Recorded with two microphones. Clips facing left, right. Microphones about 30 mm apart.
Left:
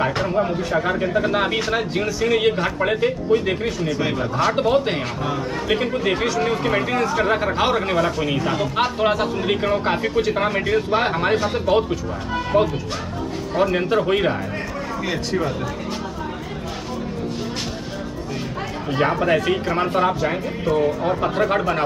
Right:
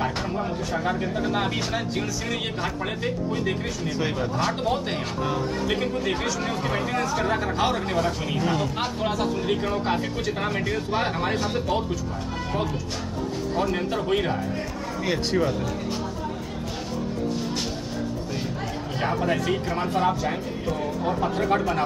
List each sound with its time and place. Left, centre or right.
0.0 s a man's voice: left
18.9 s speech: left
20.2 s a man's voice: left
20.8 s a man's voice: left